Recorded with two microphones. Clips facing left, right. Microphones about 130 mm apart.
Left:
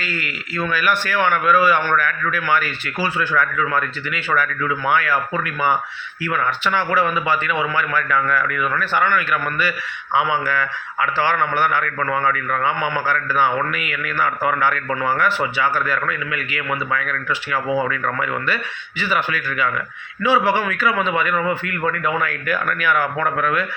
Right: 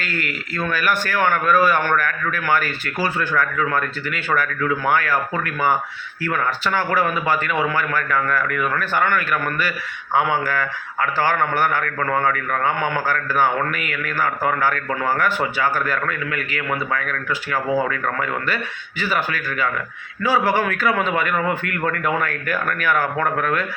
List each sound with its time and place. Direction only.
0.0 s a man's voice: 45° right (ahead or behind)
6.2 s a man's voice: 45° right (ahead or behind)